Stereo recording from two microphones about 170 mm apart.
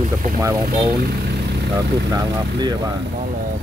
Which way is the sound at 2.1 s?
25° right (ahead or behind).